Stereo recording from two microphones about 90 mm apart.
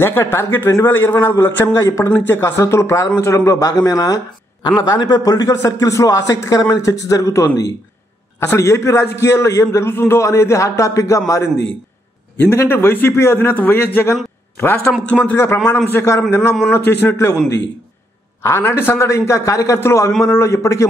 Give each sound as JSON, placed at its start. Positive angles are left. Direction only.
{"t": 0.0, "sound": "a man's voice", "side_deg": 25}
{"t": 4.6, "sound": "speech", "side_deg": 55}
{"t": 8.4, "sound": "speech", "side_deg": 30}
{"t": 12.4, "sound": "a man's voice", "side_deg": 25}
{"t": 15.0, "sound": "speech", "side_deg": 15}
{"t": 15.3, "sound": "a man's voice", "side_deg": 25}
{"t": 18.4, "sound": "speech", "side_deg": 30}